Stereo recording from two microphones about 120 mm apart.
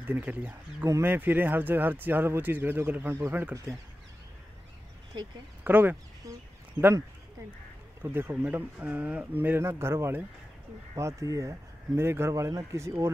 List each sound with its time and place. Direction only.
0.0 s speech: 15° right (ahead or behind)
5.6 s speech: 15° right (ahead or behind)
8.0 s speech: 15° right (ahead or behind)